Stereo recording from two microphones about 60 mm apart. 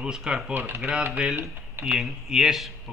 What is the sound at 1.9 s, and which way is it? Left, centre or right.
Speech, centre.